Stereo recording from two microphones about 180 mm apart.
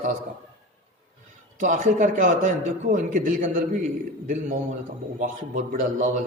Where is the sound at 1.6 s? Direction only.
45° right (ahead or behind).